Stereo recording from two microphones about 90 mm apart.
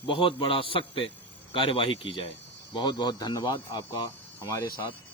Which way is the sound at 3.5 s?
70° left (ahead or behind).